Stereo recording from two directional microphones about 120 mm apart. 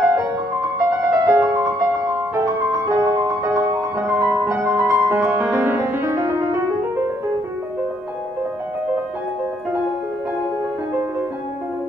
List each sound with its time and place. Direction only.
0.1 s music: 20° right (ahead or behind)